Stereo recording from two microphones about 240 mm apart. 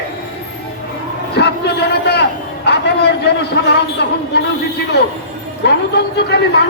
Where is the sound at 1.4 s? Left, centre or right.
Left.